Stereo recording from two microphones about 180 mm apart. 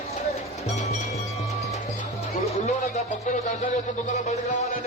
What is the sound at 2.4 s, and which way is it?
Speech, 40° left (ahead or behind).